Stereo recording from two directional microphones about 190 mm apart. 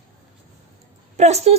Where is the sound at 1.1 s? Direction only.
35° right (ahead or behind).